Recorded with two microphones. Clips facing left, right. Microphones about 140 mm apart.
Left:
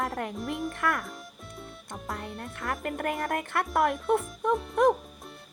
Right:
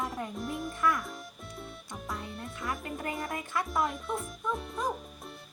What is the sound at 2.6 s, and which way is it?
Speech, 65° left (ahead or behind).